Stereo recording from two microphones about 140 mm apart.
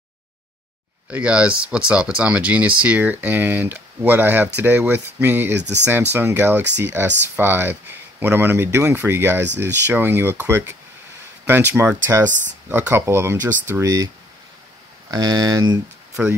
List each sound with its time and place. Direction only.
1.0 s speech: 10° right (ahead or behind)
12.3 s speech: 60° right (ahead or behind)
12.6 s speech: 15° right (ahead or behind)